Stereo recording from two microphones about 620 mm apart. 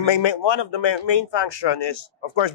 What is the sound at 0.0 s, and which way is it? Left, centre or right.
Speech, left.